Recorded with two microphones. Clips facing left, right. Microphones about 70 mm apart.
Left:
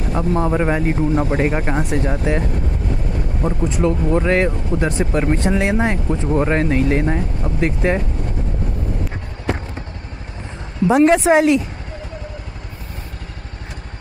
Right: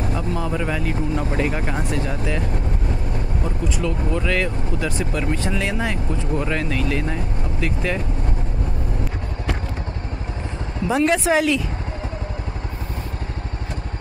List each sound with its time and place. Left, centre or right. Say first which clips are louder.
0.1 s speech: left 6 dB; left
3.4 s speech: left 8 dB; left
10.9 s speech: left 6 dB; left